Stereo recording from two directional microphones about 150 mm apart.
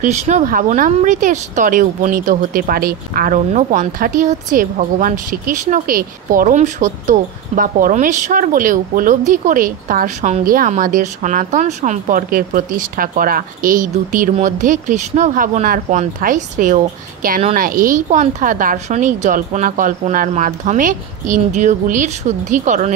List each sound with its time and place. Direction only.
0.0 s speech: 50° right (ahead or behind)
10.4 s a woman's voice: 75° right (ahead or behind)
10.7 s speech: 60° right (ahead or behind)